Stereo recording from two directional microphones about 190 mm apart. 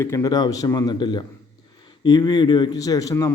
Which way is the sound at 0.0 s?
15° left (ahead or behind).